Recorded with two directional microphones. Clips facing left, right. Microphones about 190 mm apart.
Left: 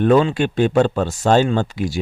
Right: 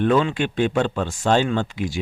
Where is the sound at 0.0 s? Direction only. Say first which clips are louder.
Left 4 dB; 40° left (ahead or behind).